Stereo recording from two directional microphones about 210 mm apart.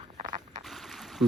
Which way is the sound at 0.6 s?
Centre (ahead or behind).